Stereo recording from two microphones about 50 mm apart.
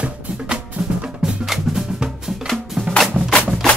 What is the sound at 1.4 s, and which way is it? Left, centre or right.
Music, centre.